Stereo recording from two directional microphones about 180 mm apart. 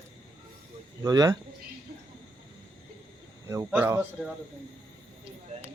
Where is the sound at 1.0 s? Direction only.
20° right (ahead or behind).